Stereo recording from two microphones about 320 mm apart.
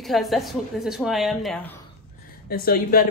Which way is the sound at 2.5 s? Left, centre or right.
Left.